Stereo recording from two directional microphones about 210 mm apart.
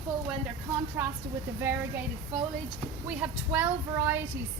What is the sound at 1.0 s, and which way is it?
Speech, 5° right (ahead or behind).